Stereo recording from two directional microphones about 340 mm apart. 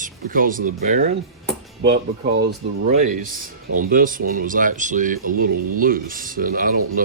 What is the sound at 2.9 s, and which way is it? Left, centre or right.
Speech, right.